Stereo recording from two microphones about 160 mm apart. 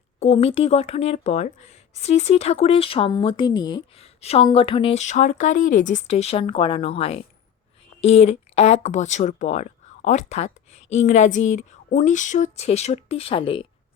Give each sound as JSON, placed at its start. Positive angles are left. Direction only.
{"t": 0.2, "sound": "speech", "side_deg": 40}
{"t": 4.0, "sound": "a woman's voice", "side_deg": 40}